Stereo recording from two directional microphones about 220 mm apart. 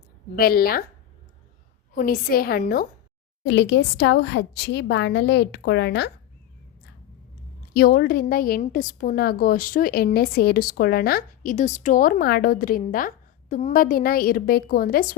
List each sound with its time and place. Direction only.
0.3 s a woman's voice: 45° left (ahead or behind)
2.0 s a woman's voice: 45° left (ahead or behind)
3.4 s a woman's voice: 55° left (ahead or behind)
7.7 s a woman's voice: 45° left (ahead or behind)